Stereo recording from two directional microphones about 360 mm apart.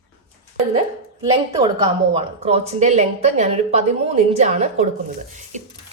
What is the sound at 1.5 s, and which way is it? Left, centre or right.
A woman's voice, centre.